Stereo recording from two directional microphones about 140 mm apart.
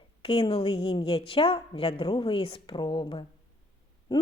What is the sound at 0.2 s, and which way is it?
A woman's voice, 40° left (ahead or behind).